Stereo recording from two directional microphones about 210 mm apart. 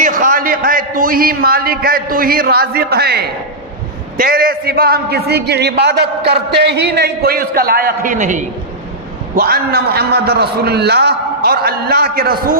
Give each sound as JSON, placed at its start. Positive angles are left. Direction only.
{"t": 0.0, "sound": "a man's voice", "side_deg": -40}